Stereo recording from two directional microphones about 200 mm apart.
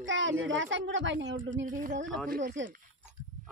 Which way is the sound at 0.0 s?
70° right (ahead or behind).